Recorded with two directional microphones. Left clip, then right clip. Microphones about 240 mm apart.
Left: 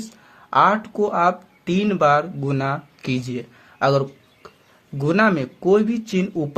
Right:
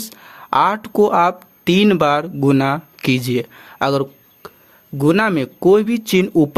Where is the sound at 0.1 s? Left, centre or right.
Right.